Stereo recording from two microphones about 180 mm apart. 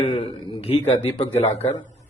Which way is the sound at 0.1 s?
30° left (ahead or behind).